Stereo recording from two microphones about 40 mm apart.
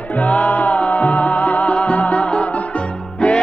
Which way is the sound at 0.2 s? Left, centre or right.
Left.